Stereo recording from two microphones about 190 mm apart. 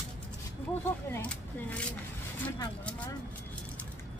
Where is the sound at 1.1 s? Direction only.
5° left (ahead or behind).